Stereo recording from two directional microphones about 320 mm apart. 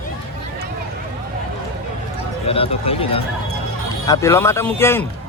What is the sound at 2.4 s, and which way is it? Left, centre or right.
A man's voice, centre.